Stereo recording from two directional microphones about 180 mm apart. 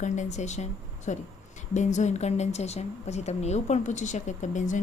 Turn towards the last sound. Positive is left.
turn(degrees=45)  # may be behind; listen again after turning